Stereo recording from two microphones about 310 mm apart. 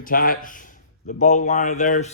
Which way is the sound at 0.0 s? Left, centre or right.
Left.